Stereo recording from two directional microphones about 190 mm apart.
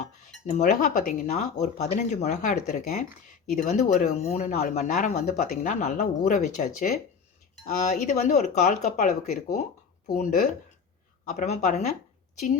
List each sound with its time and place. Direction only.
0.0 s cutlery: 40° left (ahead or behind)
10.1 s speech: 45° left (ahead or behind)
11.3 s cutlery: 40° left (ahead or behind)